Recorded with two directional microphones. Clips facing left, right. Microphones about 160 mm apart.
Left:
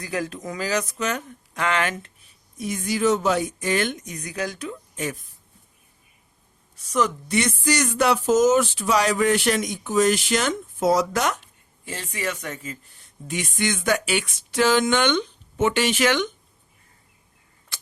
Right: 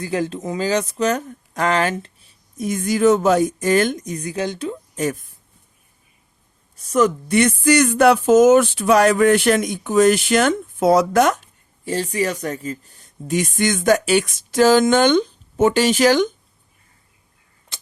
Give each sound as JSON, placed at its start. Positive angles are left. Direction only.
{"t": 0.0, "sound": "speech", "side_deg": -30}
{"t": 2.6, "sound": "speech", "side_deg": -50}
{"t": 6.7, "sound": "speech", "side_deg": -45}
{"t": 11.9, "sound": "a woman's voice", "side_deg": -35}
{"t": 17.7, "sound": "tick-tock", "side_deg": -20}